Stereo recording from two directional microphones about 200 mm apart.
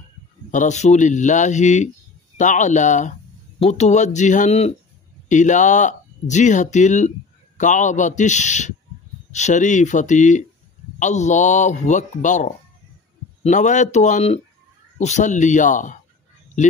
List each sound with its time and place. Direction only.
0.5 s speech: 35° left (ahead or behind)